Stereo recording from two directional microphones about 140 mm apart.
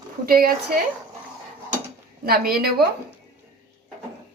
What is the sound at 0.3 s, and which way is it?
Speech, 90° right.